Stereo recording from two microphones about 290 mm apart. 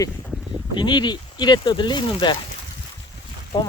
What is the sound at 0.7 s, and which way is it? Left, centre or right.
Speech, centre.